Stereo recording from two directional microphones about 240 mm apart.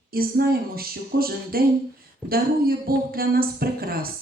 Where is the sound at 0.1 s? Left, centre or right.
Right.